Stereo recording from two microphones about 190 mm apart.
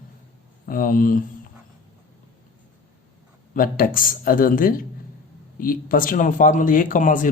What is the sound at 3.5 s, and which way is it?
Speech, 45° left (ahead or behind).